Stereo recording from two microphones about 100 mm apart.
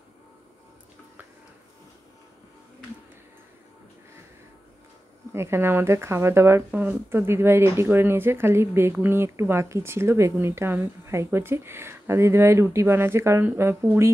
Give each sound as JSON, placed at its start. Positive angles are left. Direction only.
{"t": 5.3, "sound": "speech", "side_deg": -25}